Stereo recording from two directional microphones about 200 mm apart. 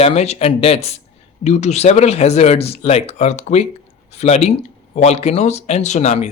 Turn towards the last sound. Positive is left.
turn(degrees=35)  # may be behind; listen again after turning